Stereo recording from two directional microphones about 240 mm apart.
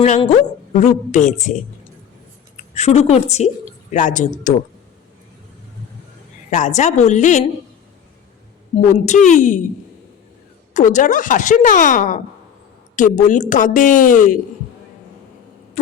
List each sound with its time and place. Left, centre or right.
0.0 s a woman's voice: left
2.7 s a woman's voice: left
6.5 s a woman's voice: left
9.3 s speech: left
10.8 s speech: left